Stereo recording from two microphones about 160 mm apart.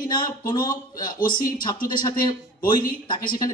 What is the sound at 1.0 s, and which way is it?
Speech, 60° left (ahead or behind).